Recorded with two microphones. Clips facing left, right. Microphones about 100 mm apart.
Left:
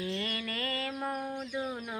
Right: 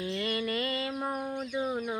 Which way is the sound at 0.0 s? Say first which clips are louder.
Right 4 dB; 20° right (ahead or behind).